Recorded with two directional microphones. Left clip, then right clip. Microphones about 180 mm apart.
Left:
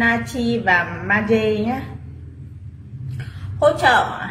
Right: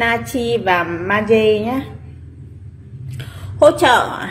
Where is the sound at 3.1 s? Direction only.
40° right (ahead or behind).